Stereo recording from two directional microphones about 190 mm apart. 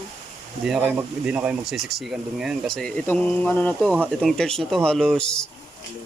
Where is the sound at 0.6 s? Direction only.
5° right (ahead or behind).